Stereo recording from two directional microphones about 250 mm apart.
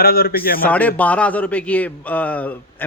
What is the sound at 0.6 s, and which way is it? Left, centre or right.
A man's voice, centre.